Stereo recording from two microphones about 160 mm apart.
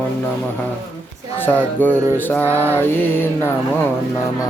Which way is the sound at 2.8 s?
15° left (ahead or behind).